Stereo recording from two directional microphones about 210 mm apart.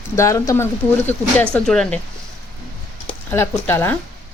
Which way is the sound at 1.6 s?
5° left (ahead or behind).